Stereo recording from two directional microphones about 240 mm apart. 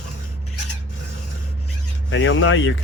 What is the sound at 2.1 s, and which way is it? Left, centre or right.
Speech, left.